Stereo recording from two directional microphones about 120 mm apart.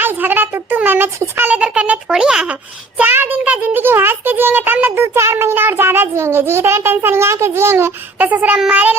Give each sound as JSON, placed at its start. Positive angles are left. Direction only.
{"t": 0.0, "sound": "a child's voice", "side_deg": -15}